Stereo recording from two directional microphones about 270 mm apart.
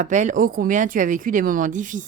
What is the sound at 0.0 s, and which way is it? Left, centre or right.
Speech, right.